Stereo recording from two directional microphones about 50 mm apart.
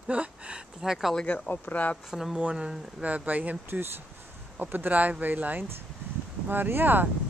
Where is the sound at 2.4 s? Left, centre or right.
Centre.